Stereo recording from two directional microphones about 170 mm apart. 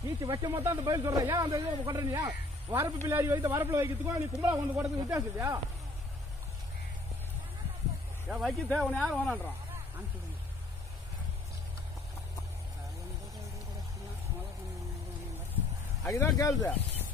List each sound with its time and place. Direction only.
0.2 s a man's voice: 20° right (ahead or behind)
8.3 s speech: centre (ahead or behind)
16.1 s speech: 20° left (ahead or behind)